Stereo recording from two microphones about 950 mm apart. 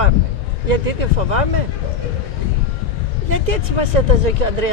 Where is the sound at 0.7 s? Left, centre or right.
Right.